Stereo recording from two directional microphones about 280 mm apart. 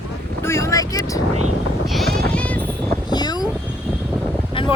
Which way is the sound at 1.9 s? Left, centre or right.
Centre.